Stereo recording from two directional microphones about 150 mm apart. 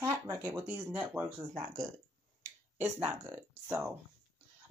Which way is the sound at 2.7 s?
15° right (ahead or behind).